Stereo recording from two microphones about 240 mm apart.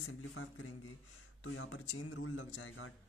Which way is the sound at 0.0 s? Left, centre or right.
Left.